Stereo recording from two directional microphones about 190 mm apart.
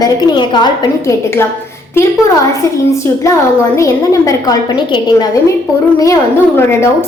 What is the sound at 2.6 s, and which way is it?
A woman's voice, 15° left (ahead or behind).